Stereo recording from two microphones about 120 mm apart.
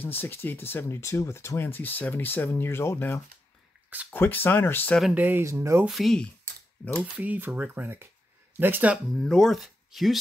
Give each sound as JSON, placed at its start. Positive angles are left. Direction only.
{"t": 0.0, "sound": "speech", "side_deg": 15}
{"t": 5.1, "sound": "speech", "side_deg": -15}
{"t": 5.9, "sound": "speech", "side_deg": 0}
{"t": 7.2, "sound": "speech", "side_deg": -15}
{"t": 9.1, "sound": "speech", "side_deg": 5}